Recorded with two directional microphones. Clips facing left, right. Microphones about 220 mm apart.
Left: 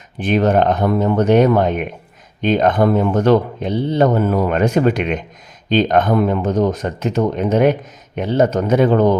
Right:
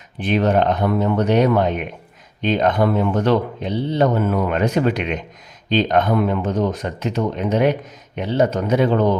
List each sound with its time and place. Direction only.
0.2 s speech: 45° left (ahead or behind)